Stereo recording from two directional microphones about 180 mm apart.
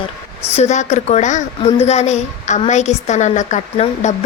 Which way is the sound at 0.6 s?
40° left (ahead or behind).